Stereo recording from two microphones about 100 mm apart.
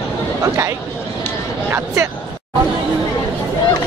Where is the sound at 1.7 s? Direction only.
20° right (ahead or behind).